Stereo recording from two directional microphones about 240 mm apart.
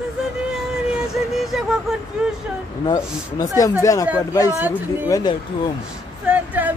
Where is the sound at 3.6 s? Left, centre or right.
Centre.